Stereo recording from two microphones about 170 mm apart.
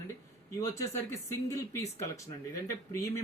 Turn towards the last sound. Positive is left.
turn(degrees=15)  # may be behind; listen again after turning